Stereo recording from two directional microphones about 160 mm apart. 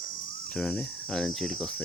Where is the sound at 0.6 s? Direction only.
5° left (ahead or behind).